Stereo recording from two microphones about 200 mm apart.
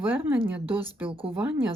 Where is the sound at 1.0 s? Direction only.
25° right (ahead or behind).